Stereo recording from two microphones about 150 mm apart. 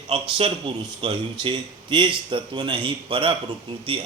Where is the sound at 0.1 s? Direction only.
40° right (ahead or behind).